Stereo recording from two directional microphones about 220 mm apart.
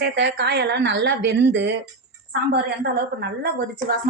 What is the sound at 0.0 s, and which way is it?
A woman's voice, 50° right (ahead or behind).